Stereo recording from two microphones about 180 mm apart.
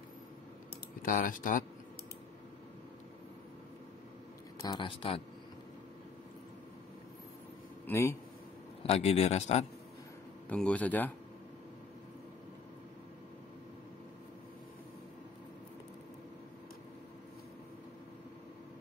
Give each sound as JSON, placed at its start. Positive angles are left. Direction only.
{"t": 1.0, "sound": "speech", "side_deg": 50}
{"t": 4.6, "sound": "speech", "side_deg": 25}
{"t": 7.8, "sound": "speech", "side_deg": 15}
{"t": 8.8, "sound": "a man's voice", "side_deg": 35}
{"t": 10.5, "sound": "speech", "side_deg": 5}